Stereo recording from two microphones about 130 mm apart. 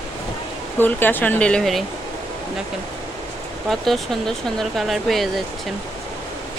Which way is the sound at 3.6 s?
Centre (ahead or behind).